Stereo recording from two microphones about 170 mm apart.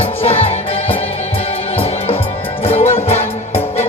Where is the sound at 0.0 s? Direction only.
35° left (ahead or behind).